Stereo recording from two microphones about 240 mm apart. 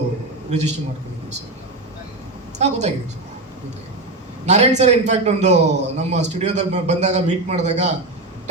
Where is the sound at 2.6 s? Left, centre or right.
Right.